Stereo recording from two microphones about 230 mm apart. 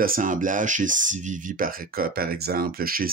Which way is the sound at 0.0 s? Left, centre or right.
Right.